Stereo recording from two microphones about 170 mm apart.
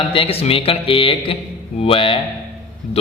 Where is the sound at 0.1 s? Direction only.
35° left (ahead or behind).